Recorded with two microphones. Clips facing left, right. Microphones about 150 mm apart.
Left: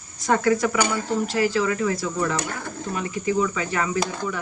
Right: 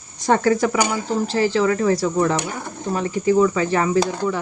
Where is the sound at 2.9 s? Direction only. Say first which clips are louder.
Right 7 dB; 35° right (ahead or behind).